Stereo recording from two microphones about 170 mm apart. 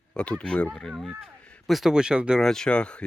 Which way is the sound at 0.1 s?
5° left (ahead or behind).